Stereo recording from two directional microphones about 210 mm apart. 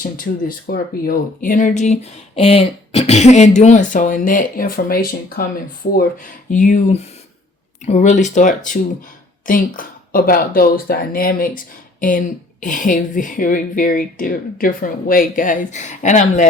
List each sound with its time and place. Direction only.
0.0 s speech: 40° left (ahead or behind)